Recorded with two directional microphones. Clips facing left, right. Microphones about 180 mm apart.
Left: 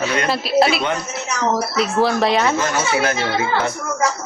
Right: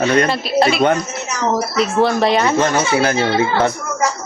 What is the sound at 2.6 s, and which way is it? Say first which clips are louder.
Speech: right 4 dB; 30° right (ahead or behind).